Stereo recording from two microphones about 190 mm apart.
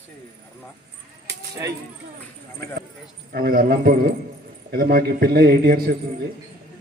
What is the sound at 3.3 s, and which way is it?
A man's voice, 50° right (ahead or behind).